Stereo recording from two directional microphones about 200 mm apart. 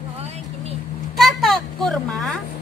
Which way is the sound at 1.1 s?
Centre (ahead or behind).